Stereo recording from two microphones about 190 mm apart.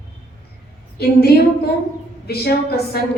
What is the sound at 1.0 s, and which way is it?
A woman's voice, 55° left (ahead or behind).